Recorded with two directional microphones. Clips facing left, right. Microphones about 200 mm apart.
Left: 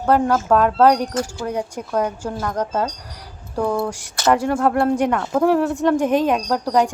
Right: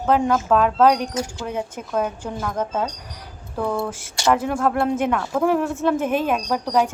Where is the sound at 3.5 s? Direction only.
15° left (ahead or behind).